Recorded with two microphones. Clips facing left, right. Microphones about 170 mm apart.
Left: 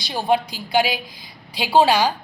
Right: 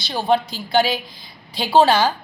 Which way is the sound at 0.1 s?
10° left (ahead or behind).